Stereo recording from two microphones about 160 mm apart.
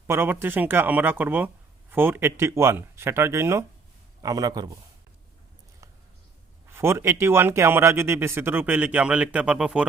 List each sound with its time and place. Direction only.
0.1 s a man's voice: 15° right (ahead or behind)
6.7 s speech: 15° right (ahead or behind)